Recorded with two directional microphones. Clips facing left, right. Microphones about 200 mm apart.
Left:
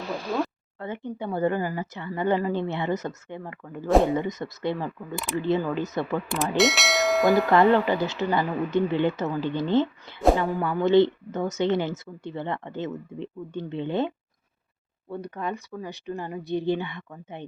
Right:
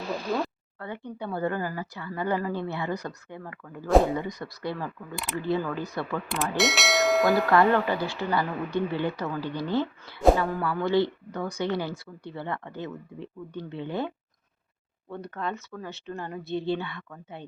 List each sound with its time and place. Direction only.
0.8 s speech: 20° left (ahead or behind)
6.6 s speech: centre (ahead or behind)
7.6 s speech: 15° left (ahead or behind)
15.1 s speech: 10° left (ahead or behind)